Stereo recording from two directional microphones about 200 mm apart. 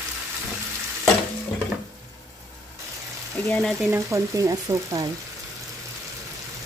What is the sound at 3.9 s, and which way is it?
Frying, 15° right (ahead or behind).